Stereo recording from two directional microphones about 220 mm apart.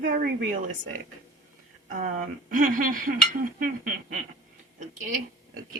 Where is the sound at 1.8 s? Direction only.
40° right (ahead or behind).